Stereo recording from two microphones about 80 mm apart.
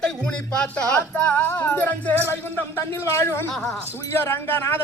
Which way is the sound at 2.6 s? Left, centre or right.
Left.